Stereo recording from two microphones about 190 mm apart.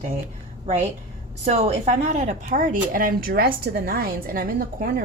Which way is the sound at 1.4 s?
35° right (ahead or behind).